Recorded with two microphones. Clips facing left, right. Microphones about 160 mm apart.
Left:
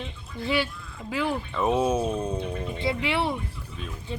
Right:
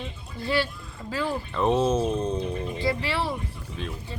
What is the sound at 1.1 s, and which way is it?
Speech, 15° left (ahead or behind).